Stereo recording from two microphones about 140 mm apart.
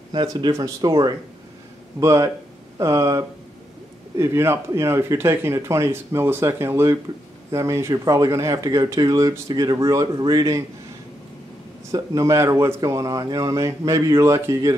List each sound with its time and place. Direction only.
0.3 s speech: 25° right (ahead or behind)
11.9 s speech: 25° right (ahead or behind)